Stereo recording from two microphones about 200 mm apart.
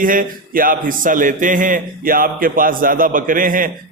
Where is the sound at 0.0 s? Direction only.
45° right (ahead or behind).